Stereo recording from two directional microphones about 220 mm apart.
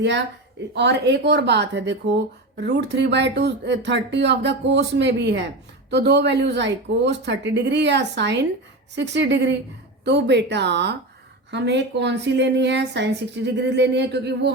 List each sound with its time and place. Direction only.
0.7 s speech: 50° right (ahead or behind)